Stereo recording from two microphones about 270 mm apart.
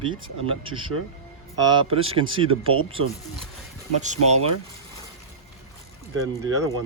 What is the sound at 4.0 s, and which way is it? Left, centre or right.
Speech, right.